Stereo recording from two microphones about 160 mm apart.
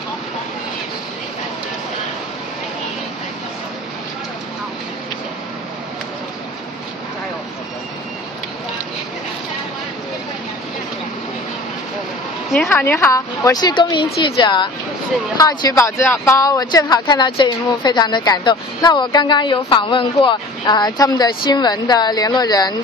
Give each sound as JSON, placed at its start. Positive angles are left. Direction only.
{"t": 12.6, "sound": "speech", "side_deg": 15}